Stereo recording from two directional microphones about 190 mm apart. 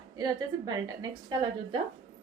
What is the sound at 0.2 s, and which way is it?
A woman's voice, 20° right (ahead or behind).